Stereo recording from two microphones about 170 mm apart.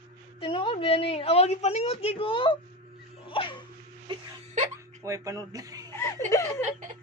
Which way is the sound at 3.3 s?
30° left (ahead or behind).